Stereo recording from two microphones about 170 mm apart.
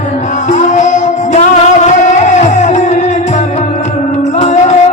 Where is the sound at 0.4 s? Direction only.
45° left (ahead or behind).